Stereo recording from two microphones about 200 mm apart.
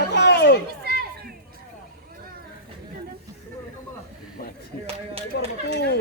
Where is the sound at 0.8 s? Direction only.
50° right (ahead or behind).